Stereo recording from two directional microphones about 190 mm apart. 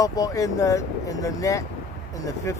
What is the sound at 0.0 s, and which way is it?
Speech, 20° left (ahead or behind).